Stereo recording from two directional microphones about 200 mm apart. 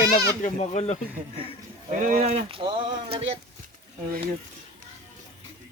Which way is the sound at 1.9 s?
40° right (ahead or behind).